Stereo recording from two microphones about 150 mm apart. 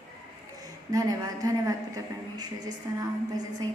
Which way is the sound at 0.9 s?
20° right (ahead or behind).